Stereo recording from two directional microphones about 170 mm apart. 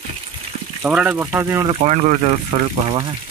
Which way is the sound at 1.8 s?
45° right (ahead or behind).